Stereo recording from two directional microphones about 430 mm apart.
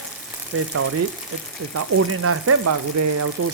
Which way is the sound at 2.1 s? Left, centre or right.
Right.